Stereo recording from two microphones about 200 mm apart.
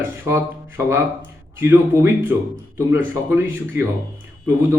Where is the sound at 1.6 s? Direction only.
10° right (ahead or behind).